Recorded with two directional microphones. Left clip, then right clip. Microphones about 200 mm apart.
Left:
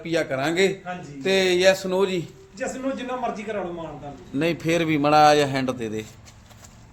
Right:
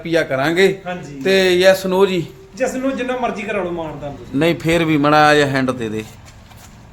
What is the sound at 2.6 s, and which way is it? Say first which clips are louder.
Speech: right 9 dB; 25° right (ahead or behind).